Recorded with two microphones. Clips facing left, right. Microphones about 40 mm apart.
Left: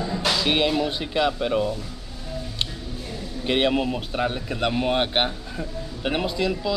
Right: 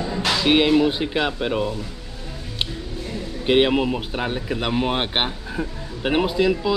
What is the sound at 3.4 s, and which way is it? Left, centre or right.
Speech, centre.